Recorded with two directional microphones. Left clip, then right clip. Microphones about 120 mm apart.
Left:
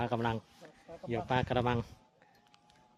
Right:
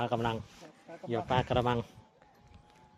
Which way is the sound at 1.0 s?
15° left (ahead or behind).